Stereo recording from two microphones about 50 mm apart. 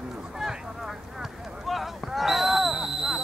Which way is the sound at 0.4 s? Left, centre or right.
Centre.